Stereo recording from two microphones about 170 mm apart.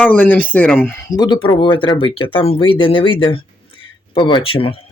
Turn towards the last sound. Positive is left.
turn(degrees=30)  # may be behind; listen again after turning